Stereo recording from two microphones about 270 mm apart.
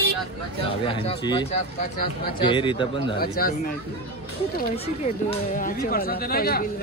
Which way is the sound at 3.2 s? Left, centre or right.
Left.